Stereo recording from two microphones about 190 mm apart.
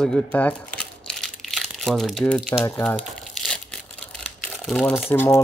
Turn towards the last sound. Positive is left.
turn(degrees=10)  # may be behind; listen again after turning